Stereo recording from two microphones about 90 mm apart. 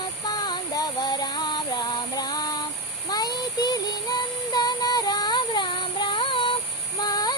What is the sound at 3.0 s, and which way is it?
Music, 50° left (ahead or behind).